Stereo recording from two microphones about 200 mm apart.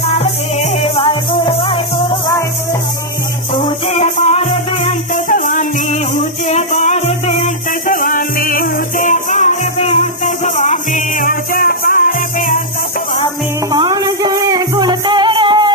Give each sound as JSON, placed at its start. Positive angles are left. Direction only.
{"t": 0.1, "sound": "music", "side_deg": 30}
{"t": 4.0, "sound": "music", "side_deg": 30}
{"t": 5.3, "sound": "music", "side_deg": 40}
{"t": 13.7, "sound": "music", "side_deg": -15}